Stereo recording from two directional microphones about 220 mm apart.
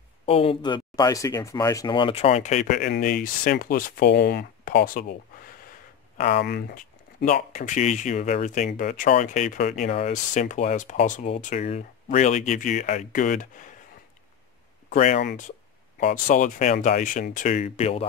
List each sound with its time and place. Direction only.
0.2 s speech: 25° left (ahead or behind)
6.1 s speech: 45° left (ahead or behind)
14.9 s speech: 35° left (ahead or behind)